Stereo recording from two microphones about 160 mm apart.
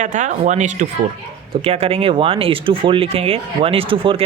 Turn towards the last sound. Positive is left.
turn(degrees=-35)  # may be behind; listen again after turning